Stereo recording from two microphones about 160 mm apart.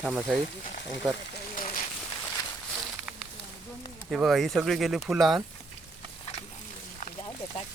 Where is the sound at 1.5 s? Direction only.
60° left (ahead or behind).